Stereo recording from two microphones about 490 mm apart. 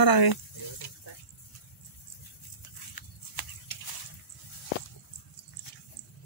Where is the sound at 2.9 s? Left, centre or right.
Left.